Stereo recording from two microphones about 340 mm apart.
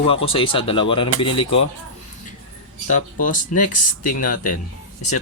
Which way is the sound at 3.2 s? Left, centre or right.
Left.